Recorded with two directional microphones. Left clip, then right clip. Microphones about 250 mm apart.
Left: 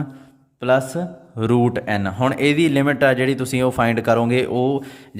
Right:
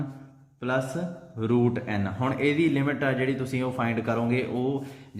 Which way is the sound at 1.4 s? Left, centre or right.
Left.